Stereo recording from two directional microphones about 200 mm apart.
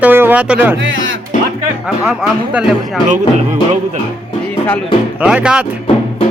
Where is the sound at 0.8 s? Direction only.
75° right (ahead or behind).